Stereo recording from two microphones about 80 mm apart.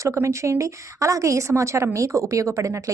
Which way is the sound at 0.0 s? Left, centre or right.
Right.